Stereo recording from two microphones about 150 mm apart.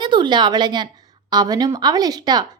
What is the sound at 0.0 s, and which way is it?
A woman's voice, 30° right (ahead or behind).